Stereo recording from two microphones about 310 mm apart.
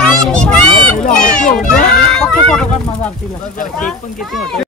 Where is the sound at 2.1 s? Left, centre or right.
Centre.